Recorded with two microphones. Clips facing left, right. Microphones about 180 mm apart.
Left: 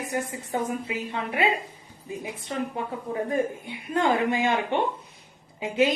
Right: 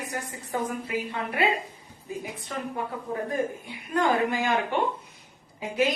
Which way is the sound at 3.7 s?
25° left (ahead or behind).